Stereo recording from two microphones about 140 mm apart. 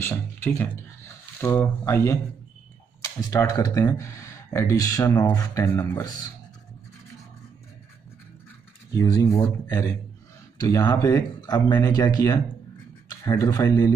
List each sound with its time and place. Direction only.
0.0 s speech: 15° left (ahead or behind)
8.9 s speech: 25° left (ahead or behind)
10.6 s speech: 25° left (ahead or behind)